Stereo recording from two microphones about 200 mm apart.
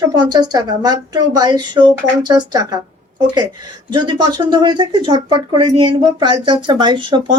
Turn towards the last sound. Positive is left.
turn(degrees=-25)  # may be behind; listen again after turning